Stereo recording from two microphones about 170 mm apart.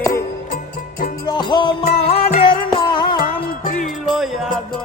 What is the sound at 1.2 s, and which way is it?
Music, 25° left (ahead or behind).